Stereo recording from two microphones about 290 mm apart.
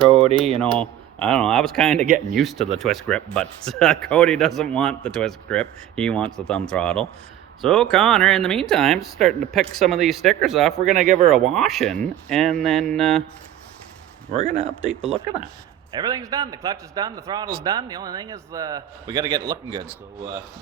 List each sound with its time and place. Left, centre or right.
0.1 s speech: right
0.6 s speech: centre
2.0 s speech: right
2.3 s speech: centre
10.9 s speech: right
11.3 s speech: centre
14.3 s speech: centre
16.0 s a man's voice: centre